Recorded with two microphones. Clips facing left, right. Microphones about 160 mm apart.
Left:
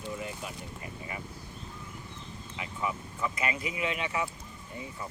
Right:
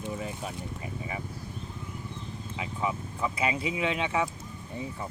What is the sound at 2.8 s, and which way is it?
Speech, 25° right (ahead or behind).